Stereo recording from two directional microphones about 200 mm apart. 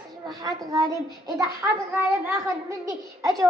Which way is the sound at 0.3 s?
20° right (ahead or behind).